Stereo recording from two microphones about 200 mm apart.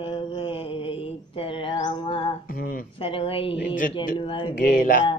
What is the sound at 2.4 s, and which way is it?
Speech, 45° left (ahead or behind).